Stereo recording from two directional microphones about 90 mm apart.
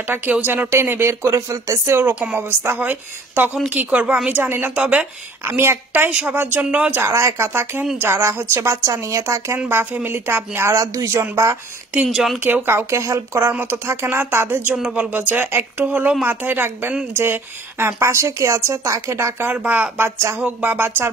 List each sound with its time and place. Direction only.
0.0 s speech: 20° right (ahead or behind)
5.4 s speech: 30° right (ahead or behind)
6.0 s speech: 15° right (ahead or behind)
7.0 s speech: 30° right (ahead or behind)
11.9 s speech: 5° right (ahead or behind)
12.6 s speech: 30° right (ahead or behind)
13.5 s speech: 20° right (ahead or behind)